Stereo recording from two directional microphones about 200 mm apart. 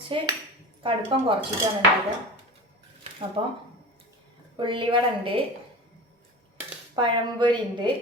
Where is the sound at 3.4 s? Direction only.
25° right (ahead or behind).